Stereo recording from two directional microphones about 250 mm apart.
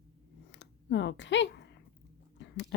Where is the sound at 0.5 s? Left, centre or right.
Left.